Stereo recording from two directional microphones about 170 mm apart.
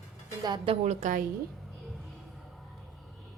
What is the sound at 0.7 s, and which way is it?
Speech, 40° right (ahead or behind).